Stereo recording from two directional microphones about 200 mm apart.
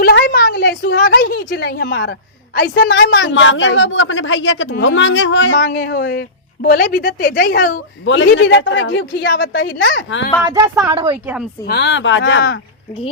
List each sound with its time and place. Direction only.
0.0 s a sound: 50° left (ahead or behind)
2.6 s a woman's voice: 65° left (ahead or behind)
5.5 s speech: 45° left (ahead or behind)
8.0 s a man's voice: 70° left (ahead or behind)
10.4 s speech: 15° right (ahead or behind)
11.6 s a man's voice: 55° left (ahead or behind)